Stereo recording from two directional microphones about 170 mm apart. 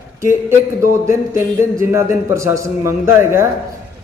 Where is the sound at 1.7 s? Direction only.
15° right (ahead or behind).